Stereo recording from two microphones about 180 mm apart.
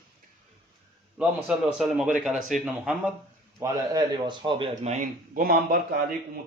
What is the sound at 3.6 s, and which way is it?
Speech, 20° right (ahead or behind).